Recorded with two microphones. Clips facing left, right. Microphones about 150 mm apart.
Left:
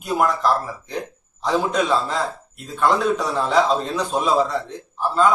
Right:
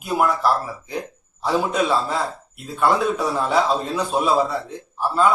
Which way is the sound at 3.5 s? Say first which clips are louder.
Left 3 dB; 5° right (ahead or behind).